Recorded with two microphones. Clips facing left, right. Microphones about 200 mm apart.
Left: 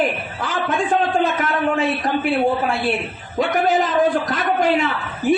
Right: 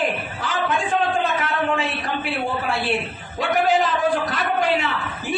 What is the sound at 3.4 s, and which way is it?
Speech, 45° left (ahead or behind).